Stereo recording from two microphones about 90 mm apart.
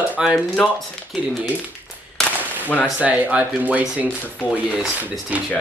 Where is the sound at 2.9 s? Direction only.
15° right (ahead or behind).